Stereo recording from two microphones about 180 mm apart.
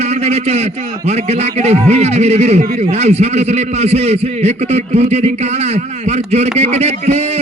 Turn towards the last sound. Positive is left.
turn(degrees=-35)  # may be behind; listen again after turning